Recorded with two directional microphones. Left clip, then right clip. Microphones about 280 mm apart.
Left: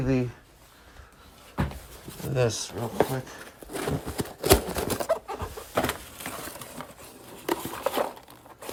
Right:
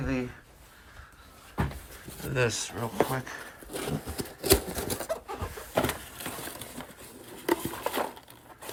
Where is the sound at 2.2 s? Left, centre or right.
Centre.